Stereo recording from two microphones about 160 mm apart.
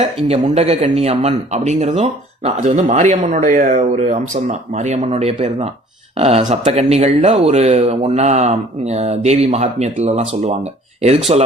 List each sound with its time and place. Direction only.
0.3 s speech: 40° right (ahead or behind)